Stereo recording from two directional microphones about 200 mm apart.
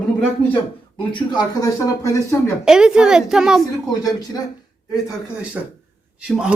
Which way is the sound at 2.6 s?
5° right (ahead or behind).